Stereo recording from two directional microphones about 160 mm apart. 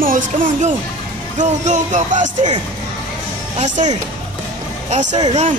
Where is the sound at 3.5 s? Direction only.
50° right (ahead or behind).